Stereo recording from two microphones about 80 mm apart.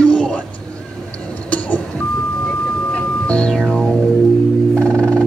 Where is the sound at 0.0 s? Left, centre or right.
Centre.